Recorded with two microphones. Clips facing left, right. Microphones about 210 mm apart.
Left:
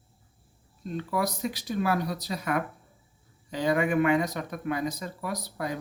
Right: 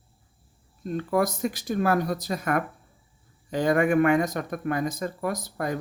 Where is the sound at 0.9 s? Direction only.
50° right (ahead or behind).